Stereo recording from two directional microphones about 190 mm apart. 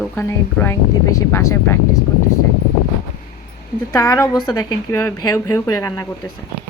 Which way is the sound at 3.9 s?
20° left (ahead or behind).